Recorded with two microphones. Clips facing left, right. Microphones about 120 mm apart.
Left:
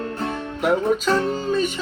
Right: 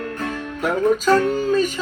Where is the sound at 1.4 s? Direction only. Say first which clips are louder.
Right 3 dB; 45° right (ahead or behind).